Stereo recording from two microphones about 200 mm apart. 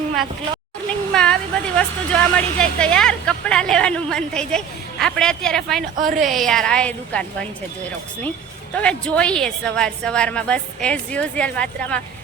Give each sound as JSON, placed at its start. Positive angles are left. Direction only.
{"t": 1.1, "sound": "a woman's voice", "side_deg": 5}
{"t": 6.0, "sound": "speech", "side_deg": -40}
{"t": 6.2, "sound": "a woman's voice", "side_deg": 0}
{"t": 8.7, "sound": "a woman's voice", "side_deg": 5}